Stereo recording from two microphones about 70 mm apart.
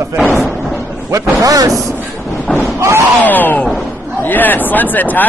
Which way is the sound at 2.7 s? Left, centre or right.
Right.